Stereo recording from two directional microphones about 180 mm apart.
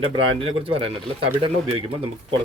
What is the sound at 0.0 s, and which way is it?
Speech, 30° right (ahead or behind).